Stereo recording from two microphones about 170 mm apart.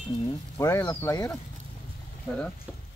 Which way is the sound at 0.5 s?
15° left (ahead or behind).